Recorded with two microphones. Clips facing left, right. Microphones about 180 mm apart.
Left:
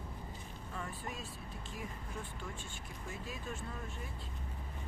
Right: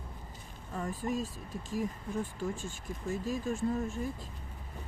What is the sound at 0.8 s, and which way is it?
Speech, 40° right (ahead or behind).